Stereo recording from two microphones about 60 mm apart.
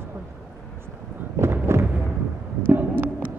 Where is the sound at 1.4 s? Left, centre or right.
Right.